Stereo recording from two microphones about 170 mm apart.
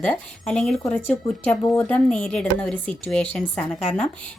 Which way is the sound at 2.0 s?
5° left (ahead or behind).